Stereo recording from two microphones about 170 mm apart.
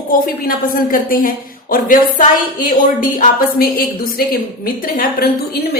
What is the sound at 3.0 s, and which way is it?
Speech, 55° left (ahead or behind).